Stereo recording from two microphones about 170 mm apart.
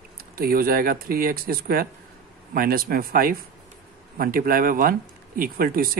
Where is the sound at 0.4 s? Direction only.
60° right (ahead or behind).